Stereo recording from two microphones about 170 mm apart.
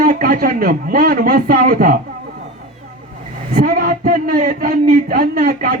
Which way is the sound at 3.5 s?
60° right (ahead or behind).